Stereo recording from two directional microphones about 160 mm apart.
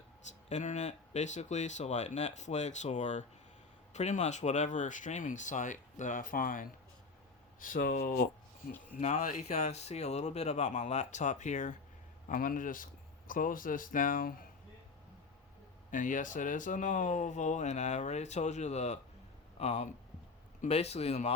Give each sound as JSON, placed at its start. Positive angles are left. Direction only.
{"t": 0.4, "sound": "speech", "side_deg": 45}
{"t": 9.0, "sound": "speech", "side_deg": 45}
{"t": 15.9, "sound": "speech", "side_deg": 55}